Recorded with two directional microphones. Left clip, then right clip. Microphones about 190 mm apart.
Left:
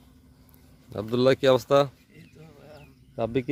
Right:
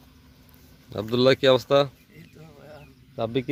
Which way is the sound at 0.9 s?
5° left (ahead or behind).